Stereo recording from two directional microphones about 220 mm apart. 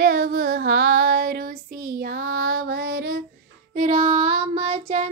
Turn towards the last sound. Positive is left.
turn(degrees=-25)  # may be behind; listen again after turning